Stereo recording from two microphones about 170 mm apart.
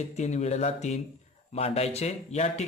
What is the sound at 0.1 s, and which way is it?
Speech, 40° left (ahead or behind).